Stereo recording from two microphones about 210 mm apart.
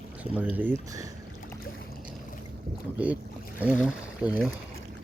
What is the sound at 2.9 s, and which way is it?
Speech, 5° right (ahead or behind).